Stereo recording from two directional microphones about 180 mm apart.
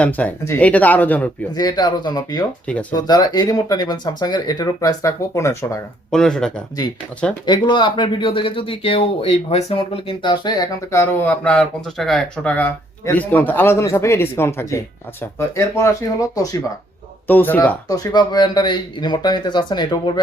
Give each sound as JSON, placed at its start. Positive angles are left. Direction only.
{"t": 0.0, "sound": "speech", "side_deg": 10}
{"t": 1.5, "sound": "speech", "side_deg": 20}
{"t": 6.1, "sound": "speech", "side_deg": 5}
{"t": 7.4, "sound": "speech", "side_deg": 25}
{"t": 11.2, "sound": "speech", "side_deg": 10}
{"t": 17.9, "sound": "speech", "side_deg": 20}